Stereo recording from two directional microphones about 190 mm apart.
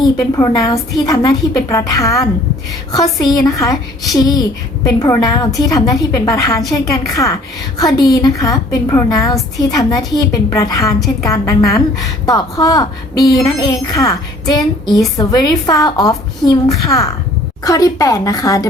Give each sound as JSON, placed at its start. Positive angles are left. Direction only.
{"t": 0.0, "sound": "a woman's voice", "side_deg": 20}